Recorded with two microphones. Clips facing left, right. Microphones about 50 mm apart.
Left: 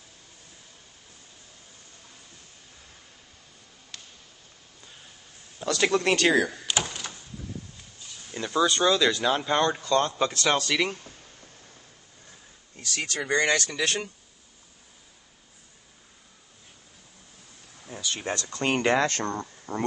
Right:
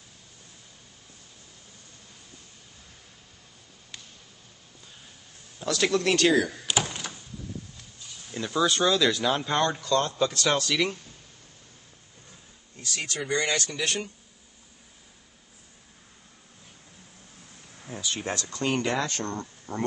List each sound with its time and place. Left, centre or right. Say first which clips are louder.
3.9 s a sound: even; centre
5.6 s speech: left 1 dB; centre
6.6 s door: right 1 dB; centre
8.1 s speech: left 1 dB; centre
9.8 s speech: left 1 dB; left
10.4 s speech: left 2 dB; centre
12.9 s speech: left 2 dB; left
17.8 s a sound: even; centre
18.4 s speech: left 3 dB; left
19.2 s speech: left 2 dB; centre